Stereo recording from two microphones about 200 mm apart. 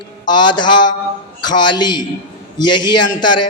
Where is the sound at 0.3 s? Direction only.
20° left (ahead or behind).